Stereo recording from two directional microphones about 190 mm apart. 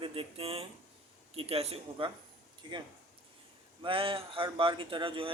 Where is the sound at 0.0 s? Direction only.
30° right (ahead or behind).